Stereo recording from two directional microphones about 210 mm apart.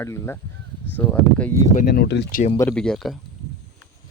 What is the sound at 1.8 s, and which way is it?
Speech, 50° left (ahead or behind).